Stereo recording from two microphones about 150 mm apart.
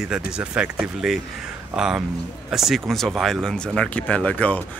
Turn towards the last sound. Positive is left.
turn(degrees=10)  # may be behind; listen again after turning